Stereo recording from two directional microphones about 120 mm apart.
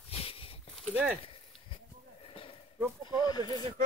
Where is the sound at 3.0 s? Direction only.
35° left (ahead or behind).